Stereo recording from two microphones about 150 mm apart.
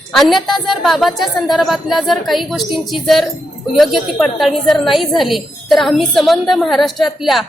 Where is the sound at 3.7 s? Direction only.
Centre (ahead or behind).